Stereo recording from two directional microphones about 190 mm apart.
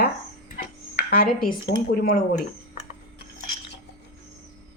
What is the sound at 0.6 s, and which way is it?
Dishes, 55° left (ahead or behind).